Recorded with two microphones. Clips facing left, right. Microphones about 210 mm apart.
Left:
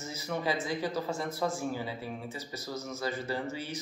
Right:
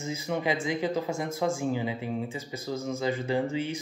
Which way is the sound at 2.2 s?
90° right.